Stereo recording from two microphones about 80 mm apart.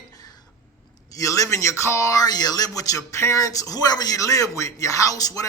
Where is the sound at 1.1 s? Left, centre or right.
Left.